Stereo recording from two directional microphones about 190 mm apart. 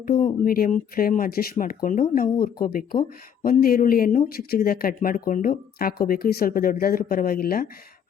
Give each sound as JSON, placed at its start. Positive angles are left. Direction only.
{"t": 0.0, "sound": "speech", "side_deg": 50}